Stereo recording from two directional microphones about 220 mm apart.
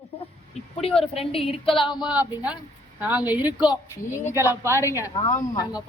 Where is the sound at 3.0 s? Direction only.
5° right (ahead or behind).